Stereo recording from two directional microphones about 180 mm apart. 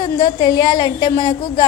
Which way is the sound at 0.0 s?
20° left (ahead or behind).